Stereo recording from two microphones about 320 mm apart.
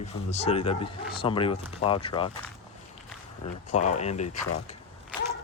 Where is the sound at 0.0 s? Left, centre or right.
Centre.